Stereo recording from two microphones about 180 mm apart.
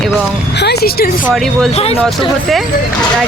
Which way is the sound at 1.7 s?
35° left (ahead or behind).